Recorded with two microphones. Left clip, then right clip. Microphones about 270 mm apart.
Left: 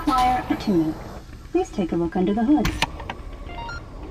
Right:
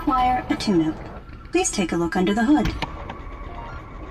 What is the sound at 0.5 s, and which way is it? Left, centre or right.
Guitar, right.